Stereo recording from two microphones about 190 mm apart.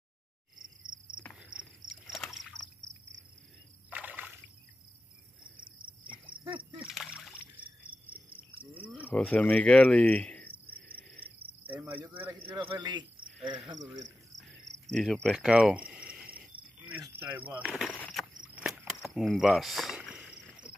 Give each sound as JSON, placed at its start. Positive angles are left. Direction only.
{"t": 1.4, "sound": "cricket", "side_deg": -5}
{"t": 3.9, "sound": "rowboat", "side_deg": -10}
{"t": 6.8, "sound": "splash", "side_deg": -5}
{"t": 9.0, "sound": "speech", "side_deg": 5}
{"t": 10.9, "sound": "cricket", "side_deg": 5}
{"t": 11.6, "sound": "cricket", "side_deg": -10}
{"t": 12.1, "sound": "a man's voice", "side_deg": -10}
{"t": 12.4, "sound": "speech", "side_deg": -25}
{"t": 14.9, "sound": "cricket", "side_deg": 0}
{"t": 17.0, "sound": "a sound", "side_deg": -10}
{"t": 17.9, "sound": "insect", "side_deg": 10}
{"t": 18.4, "sound": "cricket", "side_deg": -5}